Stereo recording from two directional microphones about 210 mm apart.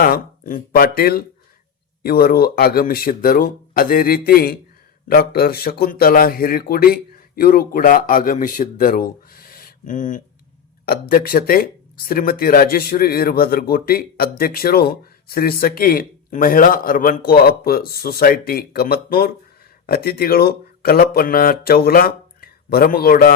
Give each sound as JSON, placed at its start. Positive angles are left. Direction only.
{"t": 0.0, "sound": "speech", "side_deg": 45}